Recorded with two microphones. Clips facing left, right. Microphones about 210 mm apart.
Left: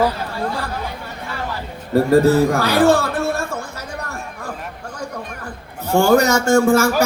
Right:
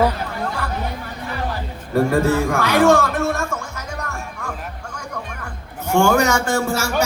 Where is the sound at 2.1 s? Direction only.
35° left (ahead or behind).